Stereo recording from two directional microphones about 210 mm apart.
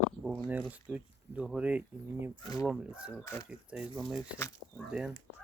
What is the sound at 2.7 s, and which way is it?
Speech, 5° right (ahead or behind).